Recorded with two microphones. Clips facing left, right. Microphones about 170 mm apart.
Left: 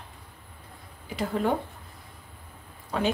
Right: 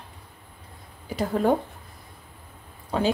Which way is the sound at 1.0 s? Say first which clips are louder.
Right 4 dB; 40° right (ahead or behind).